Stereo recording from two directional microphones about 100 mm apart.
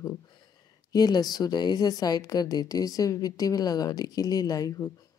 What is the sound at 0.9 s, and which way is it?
A woman's voice, 40° left (ahead or behind).